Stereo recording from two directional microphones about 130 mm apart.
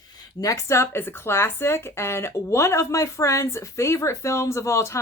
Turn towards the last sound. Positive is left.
turn(degrees=20)  # may be behind; listen again after turning